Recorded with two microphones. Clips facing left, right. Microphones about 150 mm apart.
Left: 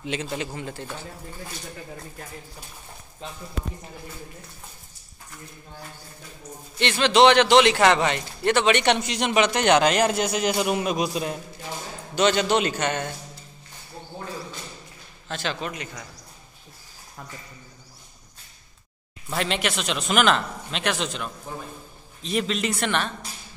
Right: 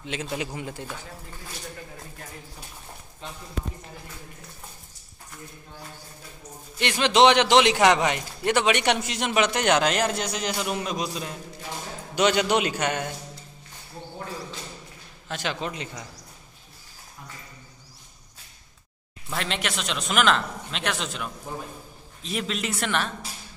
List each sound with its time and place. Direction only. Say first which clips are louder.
0.0 s a man's voice: left 2 dB; centre (ahead or behind)
0.6 s a man's voice: left 1 dB; 15° right (ahead or behind)
6.8 s a man's voice: left 1 dB; 15° right (ahead or behind); by 11.3 s 15° left (ahead or behind)
12.2 s a man's voice: left 1 dB; 10° right (ahead or behind)
15.2 s a man's voice: even; 15° right (ahead or behind)
15.7 s a man's voice: even; 25° right (ahead or behind)
19.3 s a man's voice: left 3 dB; 5° left (ahead or behind)